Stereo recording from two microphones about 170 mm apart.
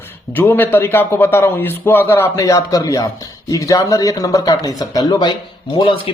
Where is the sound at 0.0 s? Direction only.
10° left (ahead or behind).